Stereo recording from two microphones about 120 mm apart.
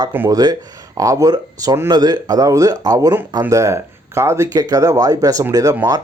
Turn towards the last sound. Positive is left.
turn(degrees=-30)  # may be behind; listen again after turning